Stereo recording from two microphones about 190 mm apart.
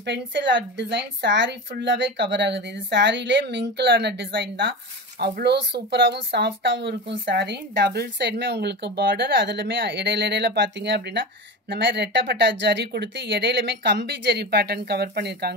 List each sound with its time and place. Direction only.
0.0 s a woman's voice: 65° right (ahead or behind)